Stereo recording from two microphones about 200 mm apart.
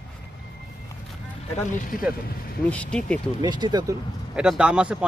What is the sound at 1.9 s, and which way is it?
Speech, 40° left (ahead or behind).